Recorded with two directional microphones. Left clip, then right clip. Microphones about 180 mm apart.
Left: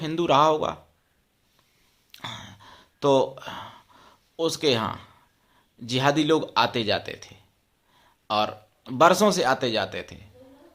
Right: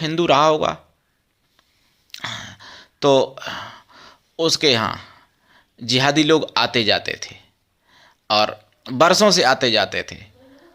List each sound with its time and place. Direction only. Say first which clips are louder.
0.0 s speech: right 5 dB; 10° right (ahead or behind)
2.1 s sigh: right 8 dB; 10° right (ahead or behind)
7.9 s speech: right 7 dB; 15° right (ahead or behind)